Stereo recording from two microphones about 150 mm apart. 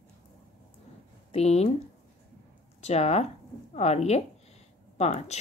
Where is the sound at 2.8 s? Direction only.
45° left (ahead or behind).